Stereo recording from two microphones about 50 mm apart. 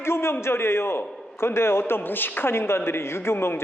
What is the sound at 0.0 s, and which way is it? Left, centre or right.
A man's voice, left.